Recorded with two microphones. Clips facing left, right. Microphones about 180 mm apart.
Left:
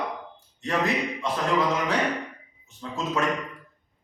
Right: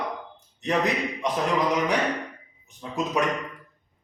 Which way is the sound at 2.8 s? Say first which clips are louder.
Right 2 dB; 15° right (ahead or behind).